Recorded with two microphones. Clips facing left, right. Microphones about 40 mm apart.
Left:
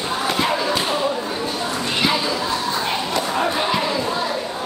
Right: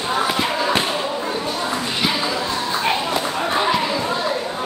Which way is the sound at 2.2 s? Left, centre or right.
Centre.